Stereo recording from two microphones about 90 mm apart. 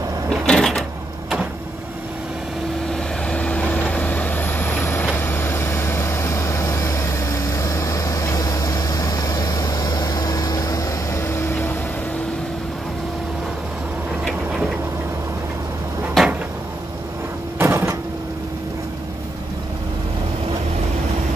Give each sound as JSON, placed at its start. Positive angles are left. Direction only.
{"t": 0.3, "sound": "drawer open or close", "side_deg": 5}
{"t": 2.9, "sound": "vehicle", "side_deg": 10}
{"t": 16.2, "sound": "cupboard open or close", "side_deg": 0}
{"t": 17.6, "sound": "a sound", "side_deg": -30}